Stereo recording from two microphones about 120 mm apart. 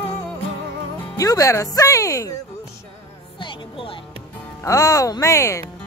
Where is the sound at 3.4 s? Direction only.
45° left (ahead or behind).